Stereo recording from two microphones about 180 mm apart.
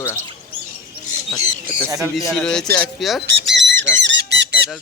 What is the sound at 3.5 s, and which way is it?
Squeak, 85° right.